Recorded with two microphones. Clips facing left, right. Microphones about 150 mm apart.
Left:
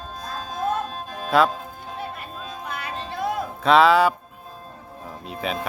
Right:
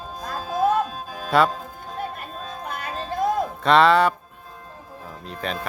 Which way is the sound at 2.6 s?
45° right (ahead or behind).